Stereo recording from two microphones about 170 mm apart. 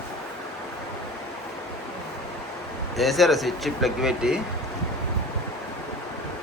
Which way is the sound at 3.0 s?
Centre (ahead or behind).